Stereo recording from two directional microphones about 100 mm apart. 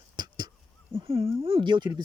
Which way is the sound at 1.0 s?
65° right (ahead or behind).